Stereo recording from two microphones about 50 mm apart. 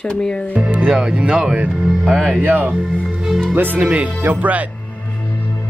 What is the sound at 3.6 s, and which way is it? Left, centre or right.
Speech, right.